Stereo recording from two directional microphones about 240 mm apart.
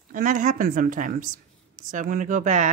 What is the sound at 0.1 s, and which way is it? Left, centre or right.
Speech, right.